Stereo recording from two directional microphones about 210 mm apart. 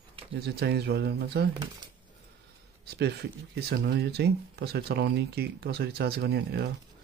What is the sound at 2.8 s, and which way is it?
Speech, 50° right (ahead or behind).